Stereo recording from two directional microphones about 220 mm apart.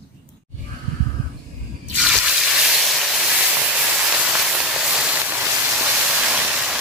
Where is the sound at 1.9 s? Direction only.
Centre (ahead or behind).